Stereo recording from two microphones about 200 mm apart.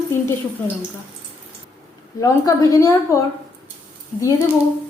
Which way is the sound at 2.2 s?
15° left (ahead or behind).